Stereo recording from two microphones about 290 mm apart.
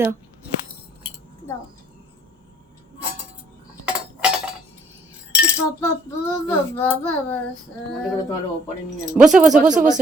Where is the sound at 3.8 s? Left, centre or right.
Centre.